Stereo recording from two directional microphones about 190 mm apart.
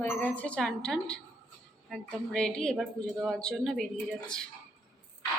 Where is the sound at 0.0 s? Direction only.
10° left (ahead or behind).